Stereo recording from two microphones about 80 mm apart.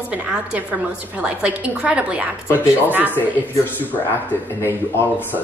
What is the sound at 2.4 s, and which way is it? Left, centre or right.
Speech, left.